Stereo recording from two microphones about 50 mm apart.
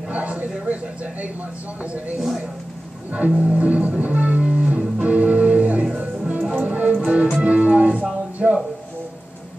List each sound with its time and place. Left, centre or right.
0.1 s a sound: right
1.8 s speech: right
3.3 s music: right